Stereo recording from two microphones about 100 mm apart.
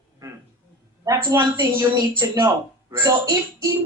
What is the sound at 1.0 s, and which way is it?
A woman's voice, 40° right (ahead or behind).